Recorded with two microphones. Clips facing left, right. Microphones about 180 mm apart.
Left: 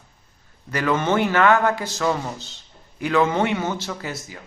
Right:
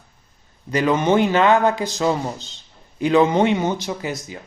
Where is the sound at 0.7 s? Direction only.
15° right (ahead or behind).